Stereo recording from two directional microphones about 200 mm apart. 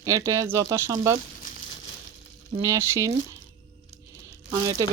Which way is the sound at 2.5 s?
15° right (ahead or behind).